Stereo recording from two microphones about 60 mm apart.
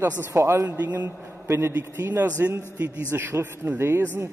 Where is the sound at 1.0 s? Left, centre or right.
Right.